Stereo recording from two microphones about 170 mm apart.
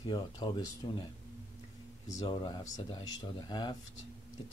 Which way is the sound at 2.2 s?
25° left (ahead or behind).